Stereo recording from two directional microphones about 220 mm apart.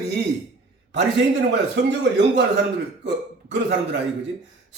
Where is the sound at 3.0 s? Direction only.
50° right (ahead or behind).